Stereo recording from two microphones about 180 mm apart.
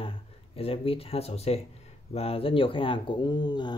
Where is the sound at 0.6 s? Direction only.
30° left (ahead or behind).